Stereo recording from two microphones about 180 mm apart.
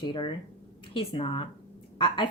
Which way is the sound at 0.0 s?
25° left (ahead or behind).